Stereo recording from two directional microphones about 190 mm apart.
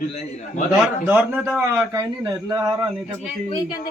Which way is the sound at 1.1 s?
10° right (ahead or behind).